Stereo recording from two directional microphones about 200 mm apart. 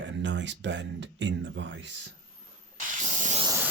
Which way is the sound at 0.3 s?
65° right (ahead or behind).